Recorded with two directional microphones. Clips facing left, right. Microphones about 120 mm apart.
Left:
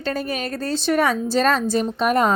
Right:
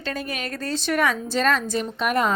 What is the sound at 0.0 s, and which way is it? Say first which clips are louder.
A woman's voice: left 5 dB; 35° left (ahead or behind).